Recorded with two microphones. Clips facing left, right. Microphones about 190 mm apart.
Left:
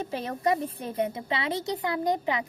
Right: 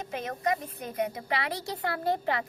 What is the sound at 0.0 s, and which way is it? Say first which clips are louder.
A woman's voice: left 3 dB; 35° left (ahead or behind).